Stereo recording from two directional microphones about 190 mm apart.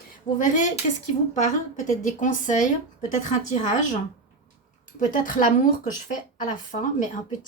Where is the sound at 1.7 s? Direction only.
40° left (ahead or behind).